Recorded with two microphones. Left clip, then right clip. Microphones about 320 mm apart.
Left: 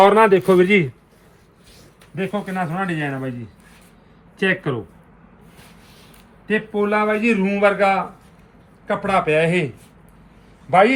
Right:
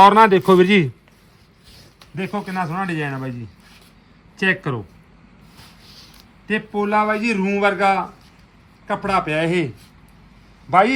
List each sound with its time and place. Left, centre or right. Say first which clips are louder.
0.0 s a man's voice: right 2 dB; centre
2.1 s speech: left 1 dB; centre
4.4 s a man's voice: even; centre
6.5 s a man's voice: even; centre
10.7 s a man's voice: left 1 dB; right